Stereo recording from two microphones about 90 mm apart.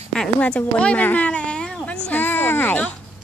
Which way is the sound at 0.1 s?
10° left (ahead or behind).